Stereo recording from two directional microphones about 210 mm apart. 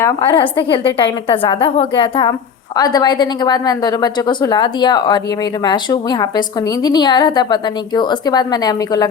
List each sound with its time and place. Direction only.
0.3 s a woman's voice: 25° left (ahead or behind)